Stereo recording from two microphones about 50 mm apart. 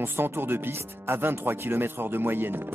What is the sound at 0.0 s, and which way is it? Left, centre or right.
Speech, right.